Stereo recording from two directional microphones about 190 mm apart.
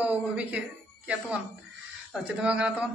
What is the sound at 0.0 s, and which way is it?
A man's voice, 5° right (ahead or behind).